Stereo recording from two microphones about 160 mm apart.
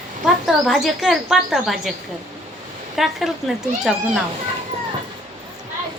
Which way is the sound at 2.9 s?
Centre (ahead or behind).